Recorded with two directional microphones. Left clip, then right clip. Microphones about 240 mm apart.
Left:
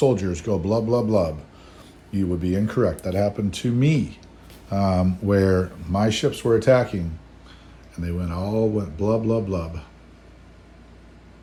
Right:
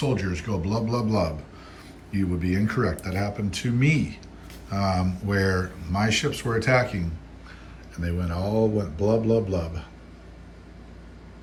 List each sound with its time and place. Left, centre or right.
0.1 s speech: centre
7.9 s speech: centre